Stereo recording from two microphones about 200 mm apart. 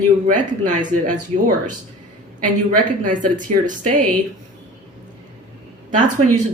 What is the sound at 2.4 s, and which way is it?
Speech, 40° right (ahead or behind).